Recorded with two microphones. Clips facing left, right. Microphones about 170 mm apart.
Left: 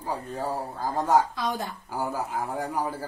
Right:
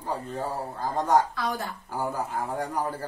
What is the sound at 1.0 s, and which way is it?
Speech, 5° left (ahead or behind).